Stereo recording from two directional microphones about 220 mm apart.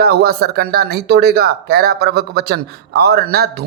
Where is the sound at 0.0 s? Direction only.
45° right (ahead or behind).